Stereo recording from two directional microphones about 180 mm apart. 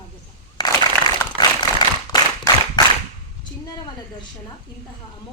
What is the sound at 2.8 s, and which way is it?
Whip, 25° left (ahead or behind).